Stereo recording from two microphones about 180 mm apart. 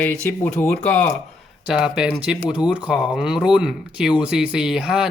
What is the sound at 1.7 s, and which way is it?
Speech, 5° right (ahead or behind).